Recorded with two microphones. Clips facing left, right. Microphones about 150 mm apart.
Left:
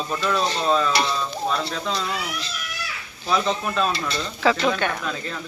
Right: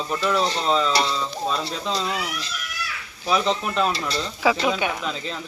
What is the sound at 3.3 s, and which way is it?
Speech, 15° right (ahead or behind).